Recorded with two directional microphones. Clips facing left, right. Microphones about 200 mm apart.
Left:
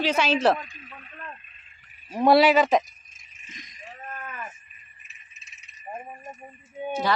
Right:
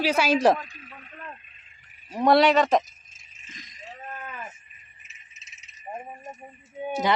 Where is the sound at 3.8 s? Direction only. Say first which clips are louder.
Even; 25° right (ahead or behind).